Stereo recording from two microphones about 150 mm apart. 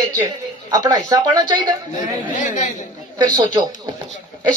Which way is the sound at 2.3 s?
55° left (ahead or behind).